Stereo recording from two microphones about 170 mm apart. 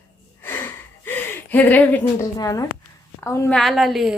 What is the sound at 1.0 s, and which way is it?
Gasp, 10° left (ahead or behind).